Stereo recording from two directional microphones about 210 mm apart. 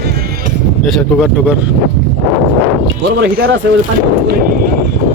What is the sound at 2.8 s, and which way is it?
Speech, 50° right (ahead or behind).